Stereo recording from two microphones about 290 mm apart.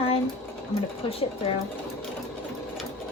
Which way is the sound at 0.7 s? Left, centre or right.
Centre.